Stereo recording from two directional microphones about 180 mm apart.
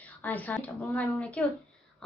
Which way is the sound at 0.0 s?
10° left (ahead or behind).